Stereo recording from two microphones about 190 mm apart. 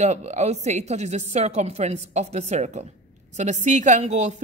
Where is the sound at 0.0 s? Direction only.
35° right (ahead or behind).